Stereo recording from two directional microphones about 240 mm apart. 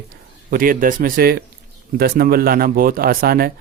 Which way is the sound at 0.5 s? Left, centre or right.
Right.